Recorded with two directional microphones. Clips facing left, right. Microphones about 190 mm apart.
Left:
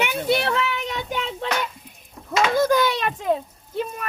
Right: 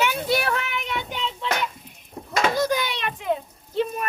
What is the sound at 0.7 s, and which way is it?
Child singing, 40° left (ahead or behind).